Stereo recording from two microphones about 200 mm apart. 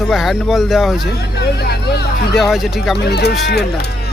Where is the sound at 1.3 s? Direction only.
55° left (ahead or behind).